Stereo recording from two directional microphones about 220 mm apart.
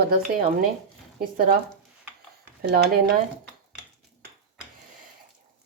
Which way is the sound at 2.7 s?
45° right (ahead or behind).